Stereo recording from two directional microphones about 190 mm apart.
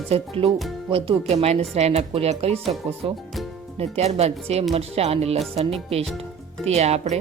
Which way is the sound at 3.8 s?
35° right (ahead or behind).